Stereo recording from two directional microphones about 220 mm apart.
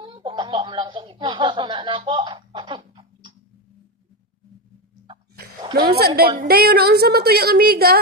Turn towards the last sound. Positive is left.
turn(degrees=-45)  # may be behind; listen again after turning